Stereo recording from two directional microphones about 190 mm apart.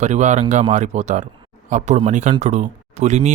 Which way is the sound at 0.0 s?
40° right (ahead or behind).